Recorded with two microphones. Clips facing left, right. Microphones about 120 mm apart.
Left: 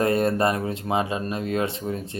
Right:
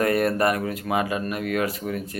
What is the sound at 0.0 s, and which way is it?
Speech, 25° left (ahead or behind).